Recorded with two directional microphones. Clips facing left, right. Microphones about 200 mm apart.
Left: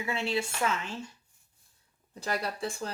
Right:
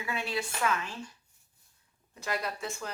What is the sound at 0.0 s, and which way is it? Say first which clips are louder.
Speech: left 3 dB; 25° left (ahead or behind).